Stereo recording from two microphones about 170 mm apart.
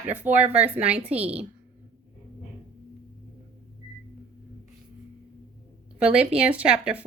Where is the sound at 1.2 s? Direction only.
35° right (ahead or behind).